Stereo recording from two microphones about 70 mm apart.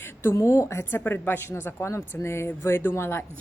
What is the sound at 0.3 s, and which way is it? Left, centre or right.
A woman's voice, left.